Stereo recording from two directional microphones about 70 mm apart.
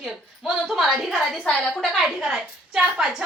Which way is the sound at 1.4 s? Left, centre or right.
Centre.